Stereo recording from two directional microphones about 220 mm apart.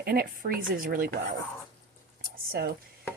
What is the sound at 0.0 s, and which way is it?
A woman's voice, 45° right (ahead or behind).